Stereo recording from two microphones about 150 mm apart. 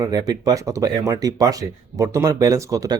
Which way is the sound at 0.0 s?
25° right (ahead or behind).